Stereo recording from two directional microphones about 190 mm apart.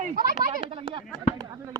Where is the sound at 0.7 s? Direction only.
25° right (ahead or behind).